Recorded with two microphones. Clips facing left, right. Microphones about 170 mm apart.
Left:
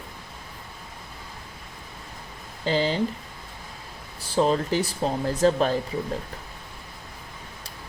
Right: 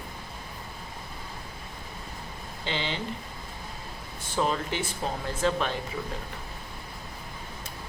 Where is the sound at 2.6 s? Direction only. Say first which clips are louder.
Left 9 dB; 40° left (ahead or behind).